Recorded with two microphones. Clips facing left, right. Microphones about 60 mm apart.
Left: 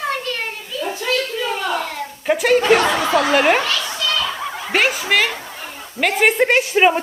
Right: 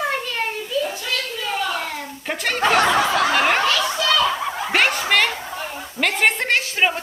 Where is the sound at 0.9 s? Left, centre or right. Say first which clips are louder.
Left 5 dB; left.